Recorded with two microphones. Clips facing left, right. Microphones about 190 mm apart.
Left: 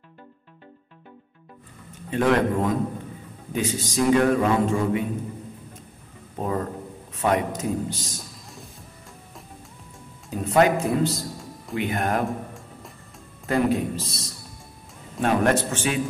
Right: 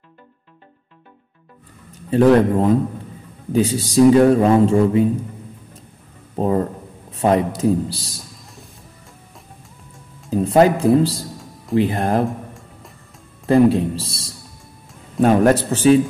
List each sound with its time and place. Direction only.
2.0 s a man's voice: 35° right (ahead or behind)
6.3 s a sound: 35° right (ahead or behind)
10.3 s a man's voice: 35° right (ahead or behind)
12.3 s music: centre (ahead or behind)
13.5 s a man's voice: 30° right (ahead or behind)